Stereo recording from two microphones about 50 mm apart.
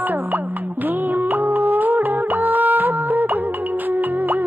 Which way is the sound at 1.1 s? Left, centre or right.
Right.